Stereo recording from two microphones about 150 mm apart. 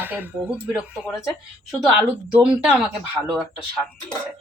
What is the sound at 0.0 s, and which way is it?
Speech, 15° right (ahead or behind).